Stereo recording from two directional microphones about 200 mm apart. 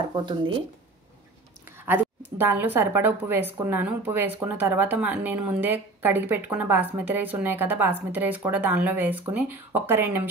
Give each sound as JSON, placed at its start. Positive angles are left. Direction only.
{"t": 0.1, "sound": "speech", "side_deg": -20}
{"t": 1.9, "sound": "speech", "side_deg": -10}